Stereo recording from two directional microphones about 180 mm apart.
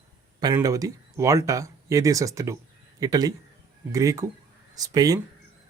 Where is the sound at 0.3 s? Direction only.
20° right (ahead or behind).